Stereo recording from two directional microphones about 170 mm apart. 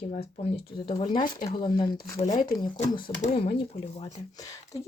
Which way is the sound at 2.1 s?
45° left (ahead or behind).